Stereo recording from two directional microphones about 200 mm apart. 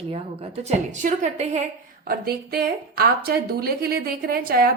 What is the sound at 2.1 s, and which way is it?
A woman's voice, 50° right (ahead or behind).